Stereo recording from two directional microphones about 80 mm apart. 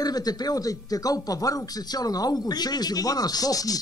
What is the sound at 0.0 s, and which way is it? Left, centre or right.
A woman's voice, left.